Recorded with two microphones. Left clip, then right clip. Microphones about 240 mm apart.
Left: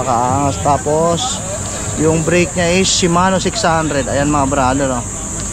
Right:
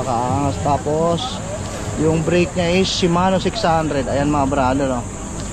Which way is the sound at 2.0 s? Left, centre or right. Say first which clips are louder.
Left 4 dB; centre.